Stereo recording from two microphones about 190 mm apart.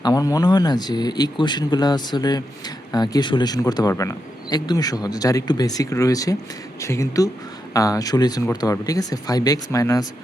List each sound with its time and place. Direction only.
0.0 s speech: 20° left (ahead or behind)